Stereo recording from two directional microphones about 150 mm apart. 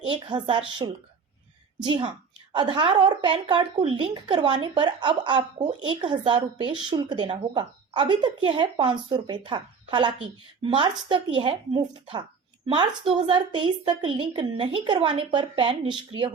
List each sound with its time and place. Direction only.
0.1 s a woman's voice: 30° right (ahead or behind)